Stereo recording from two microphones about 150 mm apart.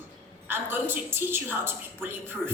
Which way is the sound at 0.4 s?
15° right (ahead or behind).